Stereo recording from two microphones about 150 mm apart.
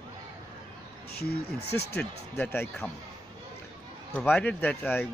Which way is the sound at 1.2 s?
90° left.